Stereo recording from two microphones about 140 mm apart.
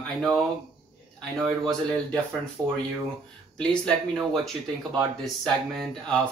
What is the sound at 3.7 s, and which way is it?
Speech, 5° left (ahead or behind).